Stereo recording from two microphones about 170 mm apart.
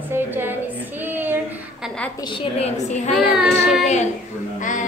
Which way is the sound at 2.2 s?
30° left (ahead or behind).